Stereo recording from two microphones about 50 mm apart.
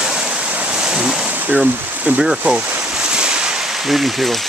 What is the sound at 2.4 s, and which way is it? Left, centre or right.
Speech, right.